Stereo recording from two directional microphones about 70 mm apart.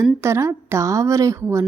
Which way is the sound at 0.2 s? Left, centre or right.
Right.